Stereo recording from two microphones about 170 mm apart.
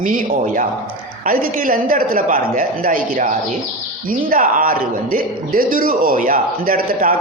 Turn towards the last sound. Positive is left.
turn(degrees=-55)  # may be behind; listen again after turning